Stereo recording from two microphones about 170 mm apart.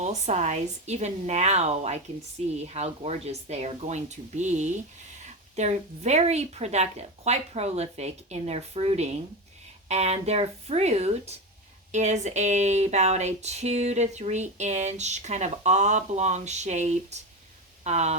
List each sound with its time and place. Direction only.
0.0 s speech: 40° right (ahead or behind)